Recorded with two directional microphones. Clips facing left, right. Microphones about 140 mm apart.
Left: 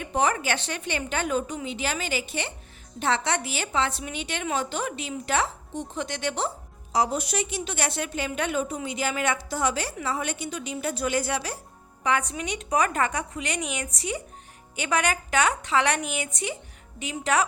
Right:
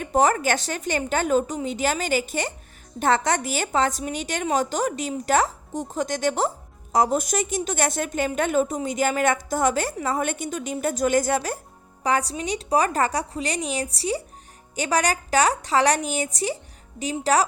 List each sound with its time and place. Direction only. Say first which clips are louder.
0.0 s a woman's voice: right 5 dB; 40° right (ahead or behind)
12.0 s a woman's voice: right 3 dB; 35° right (ahead or behind)